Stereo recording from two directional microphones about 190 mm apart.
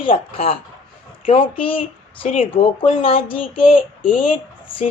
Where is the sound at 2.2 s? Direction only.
40° left (ahead or behind).